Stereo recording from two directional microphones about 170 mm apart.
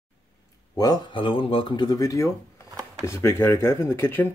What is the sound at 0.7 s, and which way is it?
Speech, 25° left (ahead or behind).